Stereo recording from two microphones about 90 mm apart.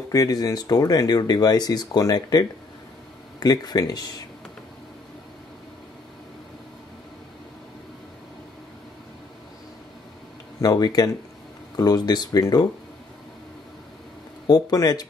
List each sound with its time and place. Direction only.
0.1 s speech: 40° left (ahead or behind)
10.6 s speech: 45° left (ahead or behind)
14.5 s speech: 45° left (ahead or behind)